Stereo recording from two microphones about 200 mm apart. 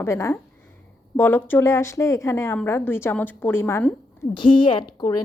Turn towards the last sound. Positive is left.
turn(degrees=20)  # may be behind; listen again after turning